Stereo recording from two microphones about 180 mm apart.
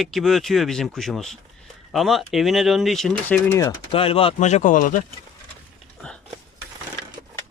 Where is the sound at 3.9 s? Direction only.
30° left (ahead or behind); by 5.0 s 45° left (ahead or behind).